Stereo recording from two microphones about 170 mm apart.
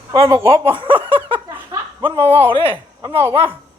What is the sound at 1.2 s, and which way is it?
Snicker, 30° right (ahead or behind).